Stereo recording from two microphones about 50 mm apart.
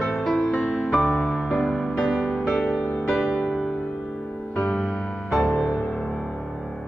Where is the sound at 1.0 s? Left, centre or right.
Left.